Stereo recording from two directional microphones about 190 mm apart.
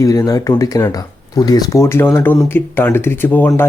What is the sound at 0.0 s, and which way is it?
Speech, 15° left (ahead or behind).